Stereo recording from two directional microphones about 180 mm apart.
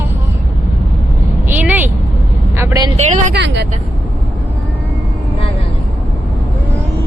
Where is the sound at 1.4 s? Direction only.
10° right (ahead or behind).